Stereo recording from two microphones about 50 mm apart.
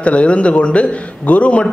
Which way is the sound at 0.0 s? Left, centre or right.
Left.